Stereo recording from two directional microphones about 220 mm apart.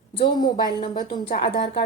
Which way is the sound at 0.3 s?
20° left (ahead or behind).